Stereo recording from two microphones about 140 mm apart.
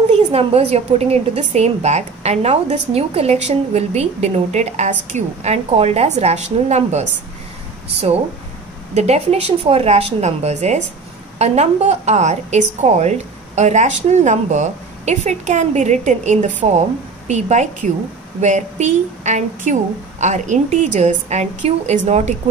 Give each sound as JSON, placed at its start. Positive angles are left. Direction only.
{"t": 0.1, "sound": "a woman's voice", "side_deg": -45}
{"t": 8.9, "sound": "a woman's voice", "side_deg": -50}